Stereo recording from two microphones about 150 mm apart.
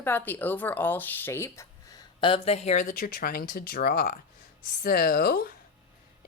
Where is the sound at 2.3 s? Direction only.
40° left (ahead or behind).